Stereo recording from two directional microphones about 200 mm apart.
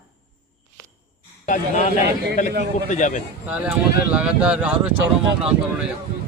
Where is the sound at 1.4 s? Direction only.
40° left (ahead or behind).